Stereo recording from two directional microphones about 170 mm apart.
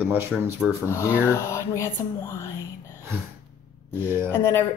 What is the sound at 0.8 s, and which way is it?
Speech, 15° left (ahead or behind).